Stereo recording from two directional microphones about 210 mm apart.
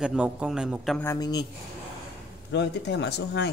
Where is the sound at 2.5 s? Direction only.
55° left (ahead or behind).